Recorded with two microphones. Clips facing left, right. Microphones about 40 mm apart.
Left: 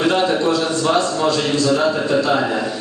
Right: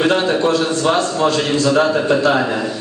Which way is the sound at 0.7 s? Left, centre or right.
Right.